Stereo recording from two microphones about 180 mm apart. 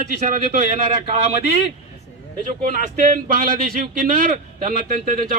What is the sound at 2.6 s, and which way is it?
A man's voice, 50° right (ahead or behind).